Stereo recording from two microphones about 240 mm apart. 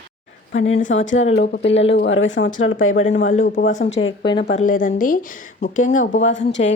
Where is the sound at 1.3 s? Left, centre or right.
Left.